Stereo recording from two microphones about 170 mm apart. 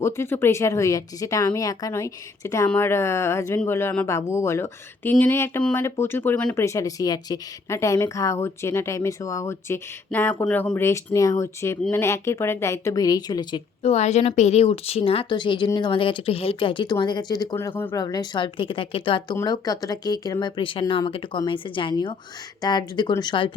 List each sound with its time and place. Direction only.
0.0 s speech: 15° left (ahead or behind)
13.9 s speech: 40° left (ahead or behind)